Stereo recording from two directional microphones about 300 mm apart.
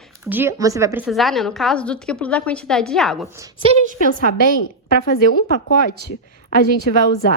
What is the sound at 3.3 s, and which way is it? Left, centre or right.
Speech, centre.